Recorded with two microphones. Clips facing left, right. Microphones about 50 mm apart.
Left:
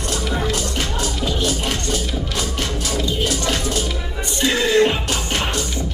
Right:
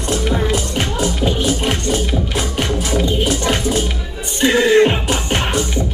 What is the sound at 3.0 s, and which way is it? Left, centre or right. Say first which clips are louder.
Music: right 3 dB; right.